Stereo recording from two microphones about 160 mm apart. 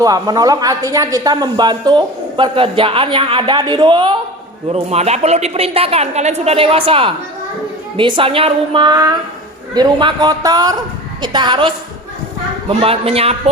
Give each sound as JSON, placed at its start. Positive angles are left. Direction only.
{"t": 0.0, "sound": "speech", "side_deg": -20}
{"t": 4.7, "sound": "a woman's voice", "side_deg": -40}